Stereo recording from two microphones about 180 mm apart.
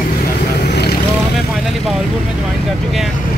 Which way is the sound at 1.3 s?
Centre (ahead or behind).